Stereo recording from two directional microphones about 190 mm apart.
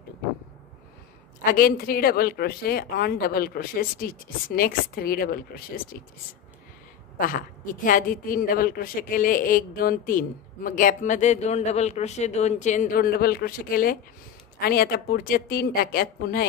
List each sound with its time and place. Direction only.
1.4 s a woman's voice: 50° left (ahead or behind)
7.2 s a woman's voice: 45° left (ahead or behind)